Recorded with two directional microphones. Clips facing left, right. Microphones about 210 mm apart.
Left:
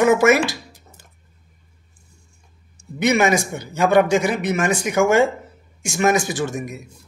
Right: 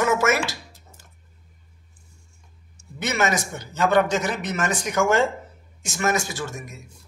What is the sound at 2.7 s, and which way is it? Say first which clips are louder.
A man's voice: left 10 dB; 15° left (ahead or behind).